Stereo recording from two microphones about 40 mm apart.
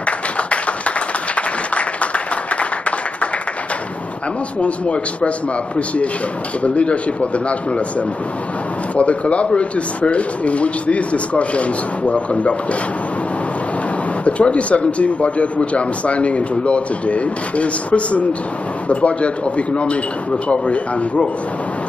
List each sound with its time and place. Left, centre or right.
0.0 s clapping: left
4.6 s a man's voice: left
6.6 s a man's voice: left
8.9 s a man's voice: left
14.2 s a man's voice: left